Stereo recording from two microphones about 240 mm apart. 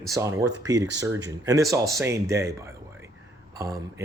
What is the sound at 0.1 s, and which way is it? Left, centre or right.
Speech, centre.